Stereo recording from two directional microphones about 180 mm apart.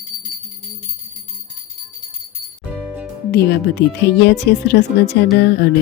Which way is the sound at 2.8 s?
5° right (ahead or behind).